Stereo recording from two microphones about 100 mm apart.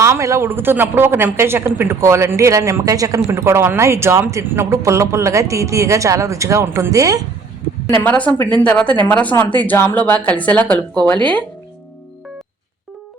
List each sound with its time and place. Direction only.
0.0 s a woman's voice: 30° right (ahead or behind)
8.0 s a woman's voice: 15° left (ahead or behind)